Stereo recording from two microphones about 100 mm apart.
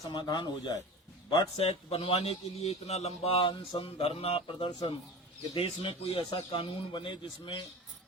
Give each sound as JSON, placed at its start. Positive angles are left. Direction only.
{"t": 0.1, "sound": "a man's voice", "side_deg": 50}
{"t": 1.5, "sound": "a man's voice", "side_deg": 75}